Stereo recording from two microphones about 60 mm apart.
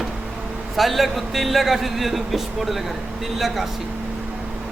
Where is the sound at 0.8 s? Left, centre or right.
Centre.